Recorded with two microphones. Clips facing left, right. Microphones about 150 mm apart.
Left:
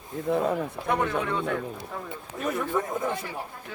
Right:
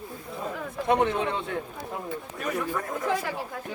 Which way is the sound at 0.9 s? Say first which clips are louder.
Right 3 dB; 20° right (ahead or behind).